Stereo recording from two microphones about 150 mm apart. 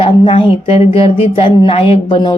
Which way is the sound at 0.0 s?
40° left (ahead or behind).